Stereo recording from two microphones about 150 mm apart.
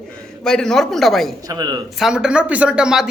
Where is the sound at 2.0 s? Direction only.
5° right (ahead or behind).